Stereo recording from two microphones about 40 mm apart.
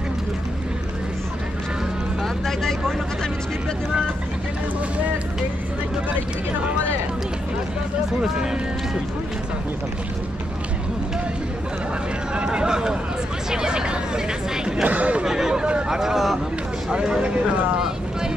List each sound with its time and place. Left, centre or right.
2.2 s vehicle: centre
12.4 s speech: right
13.5 s hubbub: centre
14.8 s speech: right
15.2 s a sound: centre
15.9 s speech: centre
16.9 s speech: right